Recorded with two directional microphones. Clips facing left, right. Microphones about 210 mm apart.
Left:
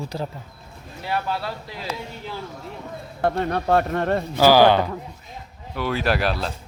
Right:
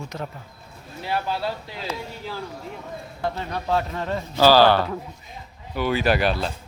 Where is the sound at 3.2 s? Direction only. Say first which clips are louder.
Left 6 dB; 55° left (ahead or behind).